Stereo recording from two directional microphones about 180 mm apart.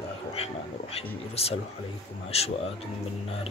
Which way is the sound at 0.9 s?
35° left (ahead or behind).